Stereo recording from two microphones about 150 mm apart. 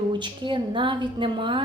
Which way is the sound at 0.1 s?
30° right (ahead or behind).